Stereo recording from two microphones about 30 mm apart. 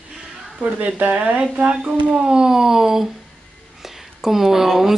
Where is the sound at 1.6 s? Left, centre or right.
Right; by 3.1 s centre.